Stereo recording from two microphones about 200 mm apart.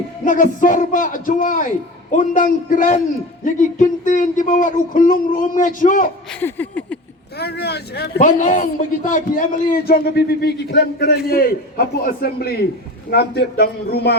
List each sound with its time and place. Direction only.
0.3 s a man's voice: 40° left (ahead or behind)
6.4 s a sound: 10° left (ahead or behind)
7.3 s speech: 55° left (ahead or behind)
8.2 s a man's voice: 40° left (ahead or behind); by 14.2 s 55° left (ahead or behind)